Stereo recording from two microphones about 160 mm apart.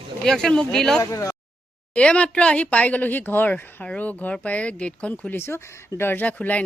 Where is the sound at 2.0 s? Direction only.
5° left (ahead or behind).